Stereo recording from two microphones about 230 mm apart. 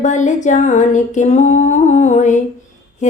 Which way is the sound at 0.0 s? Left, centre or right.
Left.